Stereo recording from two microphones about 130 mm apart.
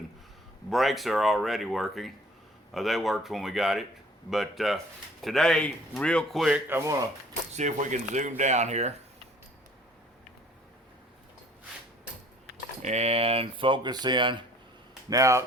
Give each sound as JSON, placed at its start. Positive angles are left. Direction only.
{"t": 0.7, "sound": "speech", "side_deg": 0}
{"t": 6.7, "sound": "speech", "side_deg": -20}
{"t": 7.5, "sound": "speech", "side_deg": -70}
{"t": 12.8, "sound": "speech", "side_deg": -55}
{"t": 15.1, "sound": "speech", "side_deg": -25}